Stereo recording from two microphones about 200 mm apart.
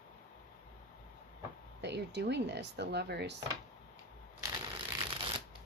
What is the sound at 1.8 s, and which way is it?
Speech, 55° right (ahead or behind).